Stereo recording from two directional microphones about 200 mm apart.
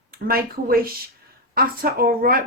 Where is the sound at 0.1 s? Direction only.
45° right (ahead or behind).